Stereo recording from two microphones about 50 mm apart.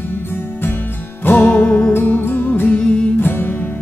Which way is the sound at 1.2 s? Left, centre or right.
Left.